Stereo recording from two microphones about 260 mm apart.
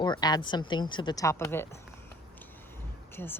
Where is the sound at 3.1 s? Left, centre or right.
Centre.